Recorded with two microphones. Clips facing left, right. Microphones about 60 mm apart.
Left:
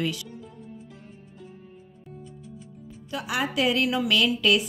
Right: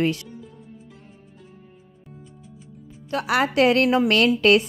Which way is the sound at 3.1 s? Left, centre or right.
Right.